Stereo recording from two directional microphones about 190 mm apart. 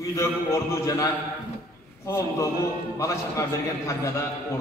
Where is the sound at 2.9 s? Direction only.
15° left (ahead or behind).